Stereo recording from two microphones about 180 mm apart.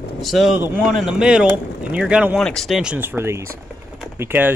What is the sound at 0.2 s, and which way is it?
Speech, centre (ahead or behind).